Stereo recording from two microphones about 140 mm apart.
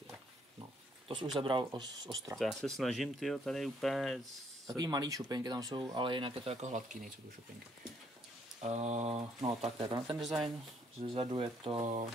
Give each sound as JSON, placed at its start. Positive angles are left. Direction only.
{"t": 1.0, "sound": "speech", "side_deg": -35}
{"t": 2.3, "sound": "speech", "side_deg": 0}
{"t": 4.7, "sound": "speech", "side_deg": -25}
{"t": 6.6, "sound": "speech", "side_deg": -60}
{"t": 8.6, "sound": "a sound", "side_deg": -50}
{"t": 9.5, "sound": "speech", "side_deg": -40}
{"t": 10.1, "sound": "speech", "side_deg": 0}
{"t": 11.0, "sound": "speech", "side_deg": -40}